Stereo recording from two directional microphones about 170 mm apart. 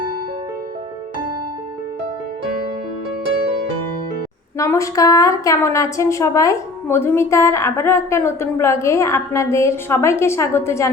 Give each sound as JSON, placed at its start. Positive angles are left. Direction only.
{"t": 4.5, "sound": "a woman's voice", "side_deg": 20}